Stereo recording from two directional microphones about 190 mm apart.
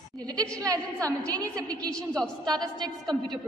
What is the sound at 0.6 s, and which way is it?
A woman's voice, 15° right (ahead or behind).